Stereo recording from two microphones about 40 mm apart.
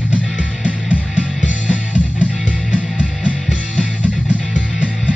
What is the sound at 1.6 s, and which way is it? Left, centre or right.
Music, right.